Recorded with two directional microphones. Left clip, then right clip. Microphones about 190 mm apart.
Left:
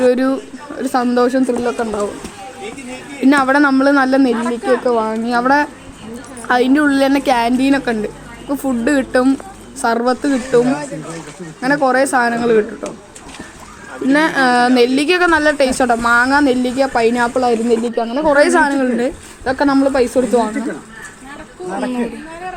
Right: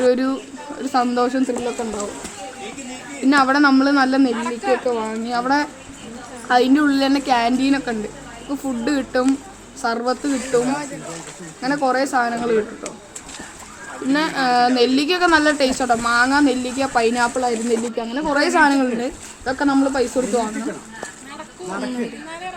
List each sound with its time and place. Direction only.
0.0 s a woman's voice: 30° left (ahead or behind)
0.8 s a sound: 30° left (ahead or behind)
1.0 s speech: 25° left (ahead or behind)
3.2 s speech: 35° left (ahead or behind)
4.3 s speech: 5° right (ahead or behind)
4.9 s speech: 35° left (ahead or behind)
14.1 s speech: 35° left (ahead or behind)